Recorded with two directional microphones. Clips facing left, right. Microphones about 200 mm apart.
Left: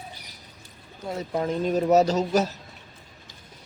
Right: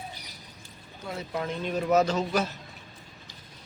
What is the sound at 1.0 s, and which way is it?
Speech, 35° left (ahead or behind).